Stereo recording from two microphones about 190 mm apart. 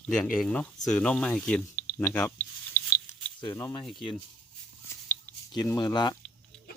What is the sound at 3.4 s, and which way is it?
Speech, 15° left (ahead or behind).